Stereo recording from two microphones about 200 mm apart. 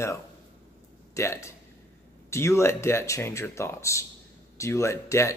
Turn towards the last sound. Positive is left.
turn(degrees=15)  # may be behind; listen again after turning